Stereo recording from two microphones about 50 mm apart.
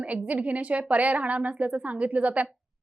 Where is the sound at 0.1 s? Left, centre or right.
Right.